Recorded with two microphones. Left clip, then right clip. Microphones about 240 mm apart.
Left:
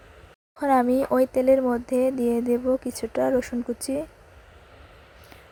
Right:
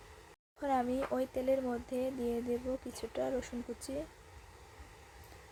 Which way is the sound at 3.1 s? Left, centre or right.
Left.